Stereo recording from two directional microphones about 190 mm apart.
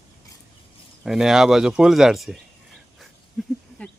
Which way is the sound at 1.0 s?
5° right (ahead or behind).